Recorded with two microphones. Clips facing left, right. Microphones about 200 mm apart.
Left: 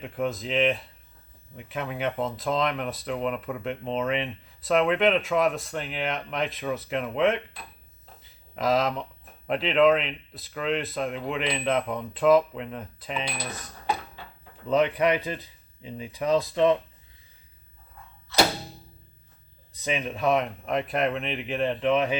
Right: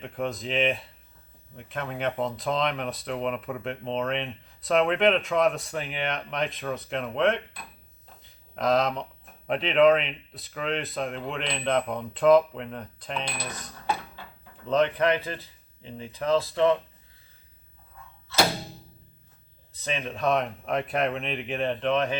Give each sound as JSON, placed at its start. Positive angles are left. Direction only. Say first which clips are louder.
{"t": 0.0, "sound": "speech", "louder": "left 2 dB", "side_deg": 0}
{"t": 14.7, "sound": "speech", "louder": "left 1 dB", "side_deg": 15}
{"t": 18.3, "sound": "a sound", "louder": "left 1 dB", "side_deg": 15}
{"t": 19.7, "sound": "a sound", "louder": "left 3 dB", "side_deg": 15}
{"t": 20.1, "sound": "speech", "louder": "even", "side_deg": 0}
{"t": 21.9, "sound": "speech", "louder": "left 1 dB", "side_deg": 15}